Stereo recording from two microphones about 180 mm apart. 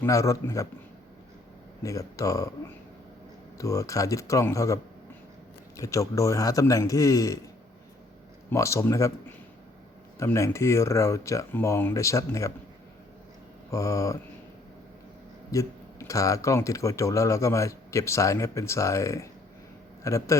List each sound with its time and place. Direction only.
0.0 s speech: 15° left (ahead or behind)
1.8 s speech: 20° left (ahead or behind)
3.6 s speech: 15° left (ahead or behind)
8.4 s speech: 15° left (ahead or behind)
13.7 s speech: 15° left (ahead or behind)
15.5 s speech: 15° left (ahead or behind)